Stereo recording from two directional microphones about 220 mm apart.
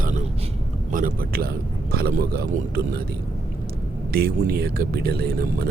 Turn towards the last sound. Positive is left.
turn(degrees=-45)  # may be behind; listen again after turning